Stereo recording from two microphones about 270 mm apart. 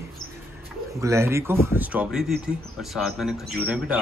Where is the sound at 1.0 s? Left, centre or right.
Centre.